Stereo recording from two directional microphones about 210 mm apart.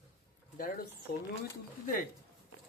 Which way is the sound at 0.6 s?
40° left (ahead or behind).